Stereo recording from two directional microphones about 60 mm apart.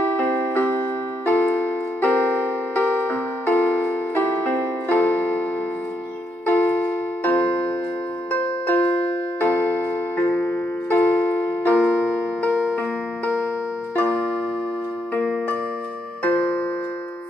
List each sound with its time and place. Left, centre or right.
0.0 s music: left
1.2 s keyboard: left
6.5 s music: left
16.3 s music: left